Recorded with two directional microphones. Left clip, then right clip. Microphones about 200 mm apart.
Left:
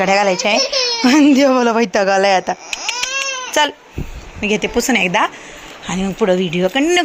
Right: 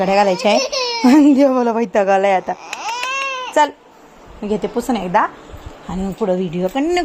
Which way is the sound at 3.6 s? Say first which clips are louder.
Right 1 dB; 5° right (ahead or behind).